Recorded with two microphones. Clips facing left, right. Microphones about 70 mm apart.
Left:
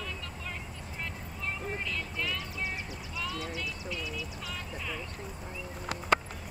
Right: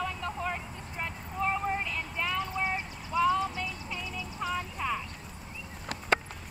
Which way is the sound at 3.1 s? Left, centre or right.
Right.